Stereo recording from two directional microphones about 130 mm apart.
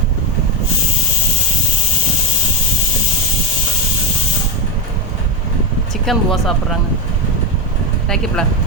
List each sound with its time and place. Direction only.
6.1 s speech: centre (ahead or behind)
8.1 s speech: 5° left (ahead or behind)